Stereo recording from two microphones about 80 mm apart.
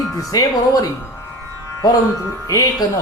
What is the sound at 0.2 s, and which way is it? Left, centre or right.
Speech, left.